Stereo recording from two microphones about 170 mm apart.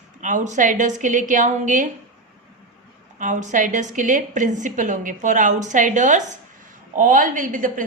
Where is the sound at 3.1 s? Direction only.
50° right (ahead or behind).